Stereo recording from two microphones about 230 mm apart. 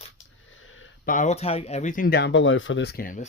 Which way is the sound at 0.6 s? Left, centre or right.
Left.